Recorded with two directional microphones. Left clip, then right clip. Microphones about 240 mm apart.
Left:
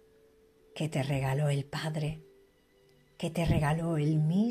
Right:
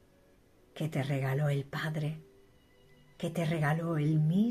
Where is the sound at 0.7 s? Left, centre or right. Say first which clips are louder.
Left 2 dB; left.